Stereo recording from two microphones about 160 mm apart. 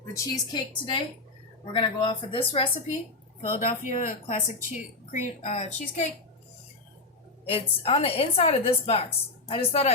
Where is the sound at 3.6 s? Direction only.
50° left (ahead or behind).